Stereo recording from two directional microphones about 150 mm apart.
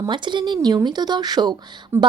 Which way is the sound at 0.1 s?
30° right (ahead or behind).